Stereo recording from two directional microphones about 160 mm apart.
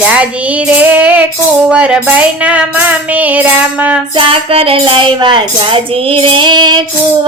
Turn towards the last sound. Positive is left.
turn(degrees=-25)  # may be behind; listen again after turning